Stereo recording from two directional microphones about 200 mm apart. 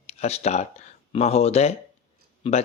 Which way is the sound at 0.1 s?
30° left (ahead or behind).